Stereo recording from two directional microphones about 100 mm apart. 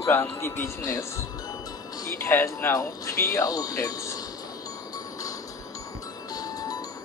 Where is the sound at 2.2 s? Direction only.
20° left (ahead or behind).